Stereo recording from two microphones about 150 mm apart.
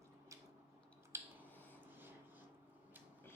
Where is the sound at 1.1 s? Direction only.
15° right (ahead or behind).